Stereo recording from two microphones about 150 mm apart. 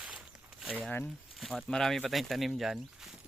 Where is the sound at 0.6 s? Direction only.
5° right (ahead or behind).